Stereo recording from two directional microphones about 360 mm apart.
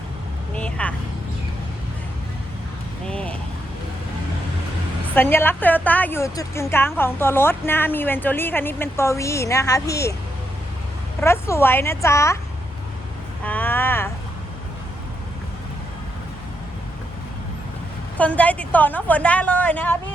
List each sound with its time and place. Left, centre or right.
0.5 s speech: centre
3.1 s a sound: centre
5.1 s a woman's voice: centre
11.2 s speech: centre
13.4 s speech: centre
18.2 s a woman's voice: centre